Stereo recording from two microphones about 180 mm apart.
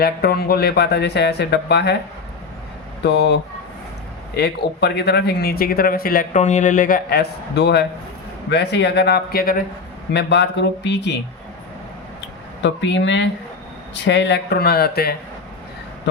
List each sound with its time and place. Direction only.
0.0 s speech: 60° left (ahead or behind)
3.0 s speech: 70° left (ahead or behind)
4.4 s speech: 65° left (ahead or behind)
10.1 s speech: 70° left (ahead or behind)
12.6 s speech: 85° left; by 15.1 s 60° left (ahead or behind)